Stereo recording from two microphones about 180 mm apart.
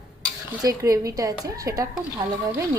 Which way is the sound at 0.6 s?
20° right (ahead or behind).